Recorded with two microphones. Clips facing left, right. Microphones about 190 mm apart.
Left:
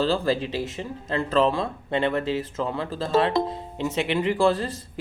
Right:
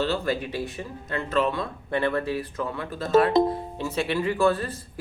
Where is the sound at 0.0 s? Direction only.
30° left (ahead or behind).